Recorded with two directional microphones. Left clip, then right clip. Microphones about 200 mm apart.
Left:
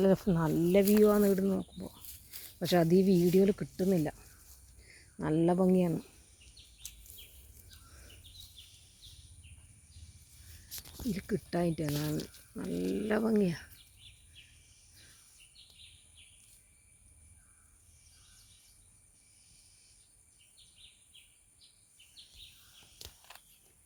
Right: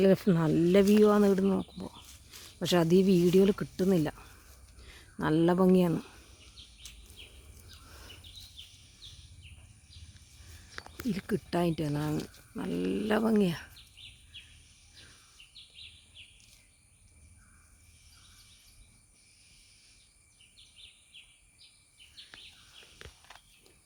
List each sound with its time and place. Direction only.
0.0 s speech: 10° right (ahead or behind)
6.8 s a sound: 35° left (ahead or behind)
11.1 s speech: centre (ahead or behind)